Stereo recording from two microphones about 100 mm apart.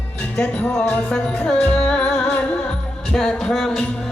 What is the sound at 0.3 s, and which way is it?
Music, 15° left (ahead or behind).